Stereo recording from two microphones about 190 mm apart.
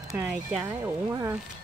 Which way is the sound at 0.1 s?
10° right (ahead or behind).